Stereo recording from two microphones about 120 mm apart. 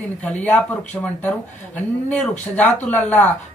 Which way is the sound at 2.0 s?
5° left (ahead or behind).